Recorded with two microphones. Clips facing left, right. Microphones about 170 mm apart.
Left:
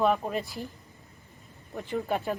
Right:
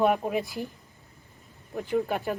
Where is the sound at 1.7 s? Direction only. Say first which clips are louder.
Right 3 dB; centre (ahead or behind).